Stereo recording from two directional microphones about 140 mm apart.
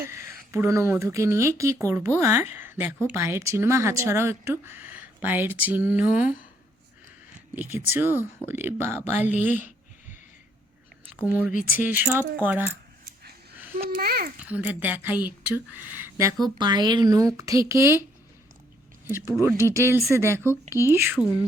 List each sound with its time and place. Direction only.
0.0 s speech: 20° right (ahead or behind)
7.5 s speech: 15° right (ahead or behind)
9.1 s speech: 55° left (ahead or behind)
9.4 s speech: 10° right (ahead or behind)
11.8 s speech: 15° right (ahead or behind)
13.7 s babbling: 90° right
14.4 s speech: 10° right (ahead or behind)
16.6 s speech: 30° right (ahead or behind)
19.0 s speech: 15° right (ahead or behind)